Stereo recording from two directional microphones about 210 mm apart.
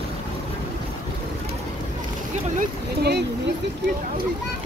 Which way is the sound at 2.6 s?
50° right (ahead or behind).